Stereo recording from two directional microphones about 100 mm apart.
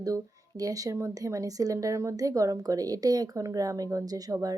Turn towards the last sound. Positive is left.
turn(degrees=-35)  # may be behind; listen again after turning